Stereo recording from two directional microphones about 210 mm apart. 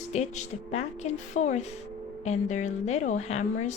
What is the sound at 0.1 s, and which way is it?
A woman's voice, 30° left (ahead or behind).